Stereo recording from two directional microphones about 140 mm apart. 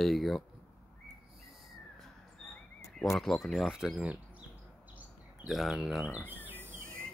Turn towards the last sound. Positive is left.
turn(degrees=-15)  # may be behind; listen again after turning